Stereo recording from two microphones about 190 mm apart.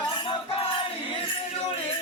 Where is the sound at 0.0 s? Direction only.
25° left (ahead or behind).